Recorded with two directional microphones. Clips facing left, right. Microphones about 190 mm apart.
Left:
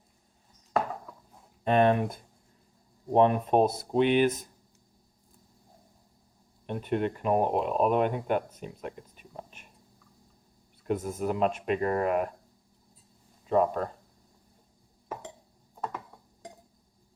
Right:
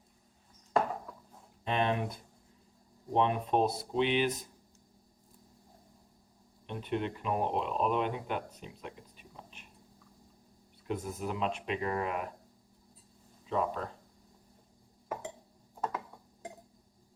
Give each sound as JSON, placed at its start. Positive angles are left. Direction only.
{"t": 1.6, "sound": "speech", "side_deg": 50}
{"t": 6.7, "sound": "speech", "side_deg": 50}
{"t": 10.8, "sound": "speech", "side_deg": 50}
{"t": 13.5, "sound": "speech", "side_deg": 50}